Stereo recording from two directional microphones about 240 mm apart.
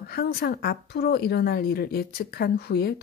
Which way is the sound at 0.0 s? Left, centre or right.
Left.